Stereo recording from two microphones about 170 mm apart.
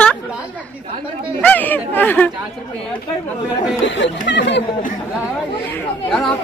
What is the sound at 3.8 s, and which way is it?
Speech, 90° left.